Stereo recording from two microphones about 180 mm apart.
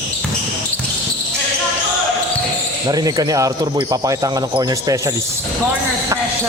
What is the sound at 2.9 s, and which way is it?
Speech, 20° right (ahead or behind).